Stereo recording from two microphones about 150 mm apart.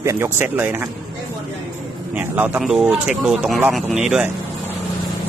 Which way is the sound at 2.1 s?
10° right (ahead or behind).